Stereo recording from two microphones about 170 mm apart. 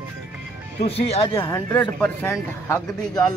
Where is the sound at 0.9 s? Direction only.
35° left (ahead or behind).